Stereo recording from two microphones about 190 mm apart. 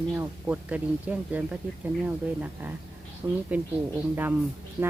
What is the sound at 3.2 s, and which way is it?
Speech, 15° right (ahead or behind).